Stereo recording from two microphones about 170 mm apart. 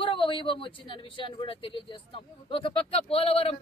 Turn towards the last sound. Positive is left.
turn(degrees=35)  # may be behind; listen again after turning